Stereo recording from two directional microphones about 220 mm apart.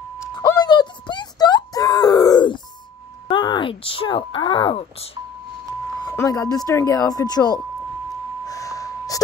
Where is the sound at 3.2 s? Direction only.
20° left (ahead or behind).